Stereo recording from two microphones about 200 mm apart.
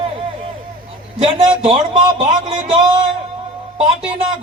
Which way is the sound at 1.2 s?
30° right (ahead or behind).